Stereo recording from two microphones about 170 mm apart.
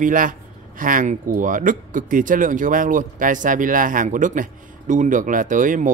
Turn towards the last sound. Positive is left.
turn(degrees=-50)  # may be behind; listen again after turning